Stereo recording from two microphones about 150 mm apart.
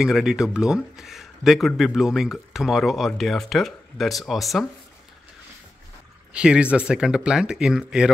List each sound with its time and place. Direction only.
0.0 s speech: centre (ahead or behind)
6.3 s speech: 5° right (ahead or behind)